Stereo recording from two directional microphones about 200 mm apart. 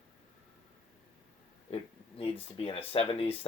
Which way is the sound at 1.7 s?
30° left (ahead or behind).